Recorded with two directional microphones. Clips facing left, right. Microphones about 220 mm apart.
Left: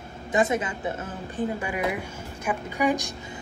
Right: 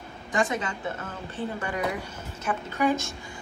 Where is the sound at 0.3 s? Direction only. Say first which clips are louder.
Left 3 dB; 20° left (ahead or behind).